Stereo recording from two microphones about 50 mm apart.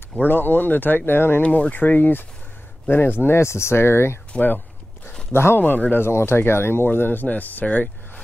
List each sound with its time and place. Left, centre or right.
0.3 s speech: left
1.4 s speech: left
5.3 s speech: left
5.6 s speech: left
6.0 s speech: left